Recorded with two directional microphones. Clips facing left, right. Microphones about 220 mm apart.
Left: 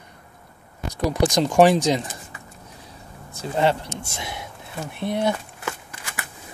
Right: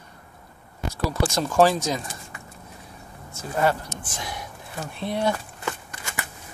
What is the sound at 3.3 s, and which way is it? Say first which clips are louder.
Speech: left 2 dB; 25° left (ahead or behind).